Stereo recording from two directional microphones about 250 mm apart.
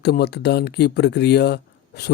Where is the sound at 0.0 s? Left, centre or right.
Left.